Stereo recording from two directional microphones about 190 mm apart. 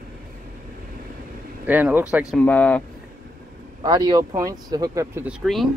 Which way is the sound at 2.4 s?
5° left (ahead or behind).